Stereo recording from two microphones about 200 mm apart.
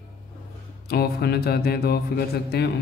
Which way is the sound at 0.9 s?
50° left (ahead or behind).